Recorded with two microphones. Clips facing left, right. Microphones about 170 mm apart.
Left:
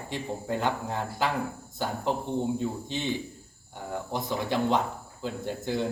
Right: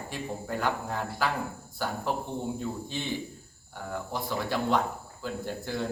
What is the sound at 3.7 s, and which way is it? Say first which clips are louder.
Speech: left 2 dB; 20° left (ahead or behind).